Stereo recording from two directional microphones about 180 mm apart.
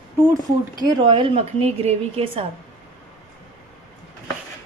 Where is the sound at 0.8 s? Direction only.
30° right (ahead or behind).